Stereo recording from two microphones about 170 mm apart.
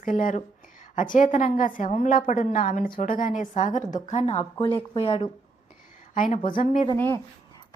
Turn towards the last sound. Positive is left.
turn(degrees=15)  # may be behind; listen again after turning